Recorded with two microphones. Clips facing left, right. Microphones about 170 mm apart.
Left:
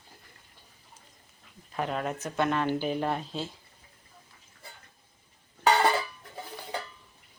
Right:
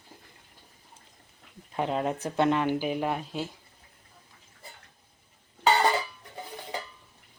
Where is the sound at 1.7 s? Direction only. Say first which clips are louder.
Right 3 dB; 25° right (ahead or behind).